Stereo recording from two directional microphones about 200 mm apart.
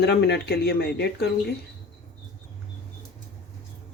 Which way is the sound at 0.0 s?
55° left (ahead or behind).